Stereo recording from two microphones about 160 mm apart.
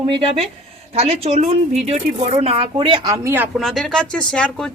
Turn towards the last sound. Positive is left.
turn(degrees=5)  # may be behind; listen again after turning